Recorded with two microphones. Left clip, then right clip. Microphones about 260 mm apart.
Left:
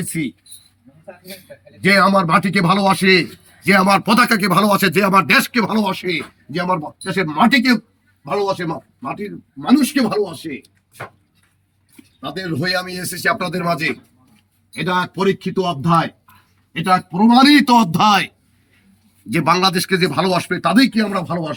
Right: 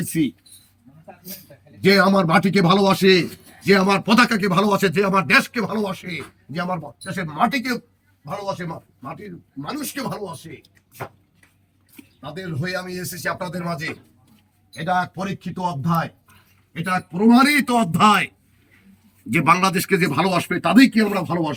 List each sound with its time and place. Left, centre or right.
1.8 s a man's voice: centre; by 10.2 s left
12.4 s a man's voice: left
19.3 s speech: centre